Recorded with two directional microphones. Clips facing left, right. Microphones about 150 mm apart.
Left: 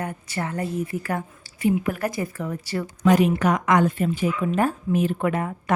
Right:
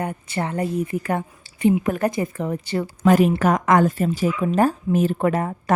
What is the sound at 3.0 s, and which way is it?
A woman's voice, 45° right (ahead or behind).